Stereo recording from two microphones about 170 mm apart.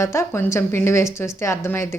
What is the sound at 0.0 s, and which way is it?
A woman's voice, 15° left (ahead or behind).